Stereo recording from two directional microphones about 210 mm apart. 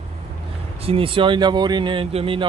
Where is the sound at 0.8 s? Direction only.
25° right (ahead or behind).